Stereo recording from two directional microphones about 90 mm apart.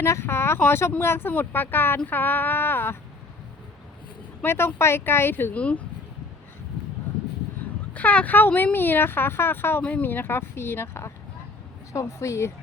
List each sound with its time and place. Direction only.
0.0 s speech: 30° left (ahead or behind)
4.4 s speech: 25° left (ahead or behind)
7.9 s a woman's voice: 15° left (ahead or behind); by 12.5 s 35° left (ahead or behind)